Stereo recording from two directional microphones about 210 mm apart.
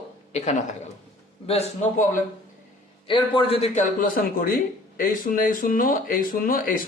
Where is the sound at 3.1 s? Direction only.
25° left (ahead or behind).